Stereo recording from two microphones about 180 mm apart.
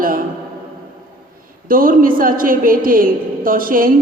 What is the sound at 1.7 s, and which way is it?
Speech, 50° right (ahead or behind).